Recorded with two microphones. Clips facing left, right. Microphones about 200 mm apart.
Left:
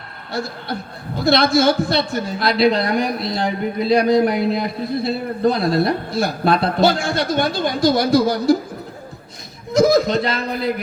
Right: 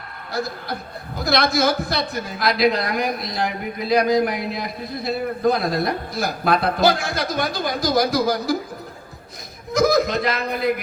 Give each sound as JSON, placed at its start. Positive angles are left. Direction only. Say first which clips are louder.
{"t": 0.3, "sound": "a man's voice", "louder": "left 1 dB", "side_deg": 30}
{"t": 9.7, "sound": "a man's voice", "louder": "left 4 dB", "side_deg": 30}